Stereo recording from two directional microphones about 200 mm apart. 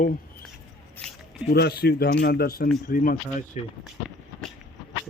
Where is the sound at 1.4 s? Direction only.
55° left (ahead or behind).